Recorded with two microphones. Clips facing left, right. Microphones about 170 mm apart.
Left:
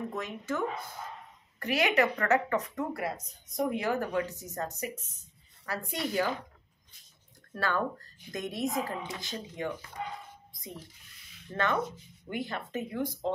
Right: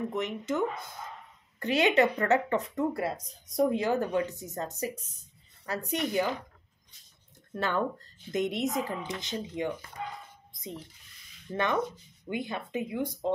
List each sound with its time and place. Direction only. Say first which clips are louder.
0.1 s speech: right 4 dB; 20° right (ahead or behind)
5.7 s speech: right 3 dB; 20° right (ahead or behind)
7.5 s speech: right 1 dB; 20° right (ahead or behind)
11.5 s speech: right 1 dB; 15° right (ahead or behind)